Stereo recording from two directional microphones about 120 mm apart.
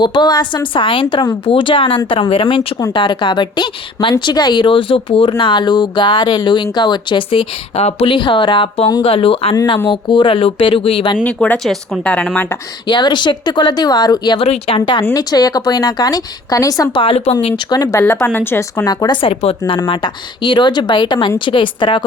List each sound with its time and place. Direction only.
0.0 s speech: 40° left (ahead or behind)
11.2 s speech: 10° left (ahead or behind)
12.9 s speech: 40° left (ahead or behind)
14.3 s speech: 60° left (ahead or behind)
14.8 s speech: 40° left (ahead or behind)
16.9 s speech: 50° left (ahead or behind)
17.7 s speech: 35° left (ahead or behind)
18.0 s speech: 15° left (ahead or behind)
18.9 s speech: 35° left (ahead or behind)
19.2 s speech: 55° left (ahead or behind)
19.8 s speech: 40° left (ahead or behind)